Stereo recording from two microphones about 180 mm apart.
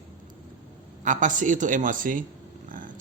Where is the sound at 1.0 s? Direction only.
45° right (ahead or behind).